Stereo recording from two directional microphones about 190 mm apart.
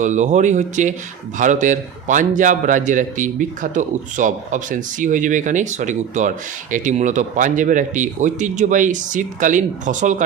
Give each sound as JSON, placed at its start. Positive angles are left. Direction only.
{"t": 0.0, "sound": "a man's voice", "side_deg": -40}